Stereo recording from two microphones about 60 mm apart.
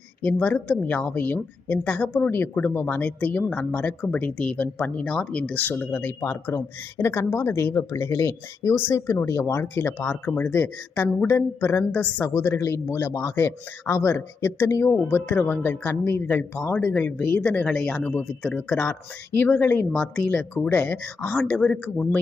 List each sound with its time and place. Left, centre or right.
0.2 s a woman's voice: left
5.5 s a woman's voice: left
6.1 s speech: left
12.2 s a woman's voice: left
15.3 s a woman's voice: left
17.7 s speech: centre
18.0 s speech: left
18.7 s a woman's voice: left
19.7 s a woman's voice: centre